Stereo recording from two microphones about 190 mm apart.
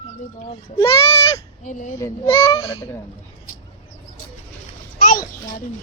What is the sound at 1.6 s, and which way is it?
Speech, 40° left (ahead or behind).